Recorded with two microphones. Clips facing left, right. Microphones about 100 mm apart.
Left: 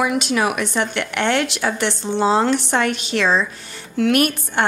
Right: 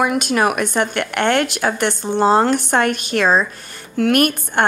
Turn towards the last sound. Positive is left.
turn(degrees=-50)  # may be behind; listen again after turning